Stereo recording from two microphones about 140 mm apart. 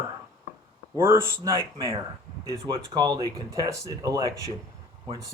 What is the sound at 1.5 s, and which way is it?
Speech, 25° left (ahead or behind).